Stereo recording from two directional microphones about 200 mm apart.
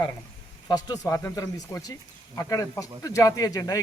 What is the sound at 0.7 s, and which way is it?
Speech, 20° left (ahead or behind).